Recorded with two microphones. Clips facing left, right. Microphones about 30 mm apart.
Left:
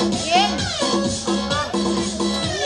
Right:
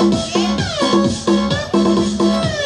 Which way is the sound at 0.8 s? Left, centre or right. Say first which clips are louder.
Right 8 dB; right.